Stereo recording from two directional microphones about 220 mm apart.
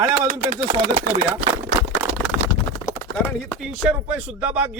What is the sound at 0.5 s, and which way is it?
Speech, 35° right (ahead or behind).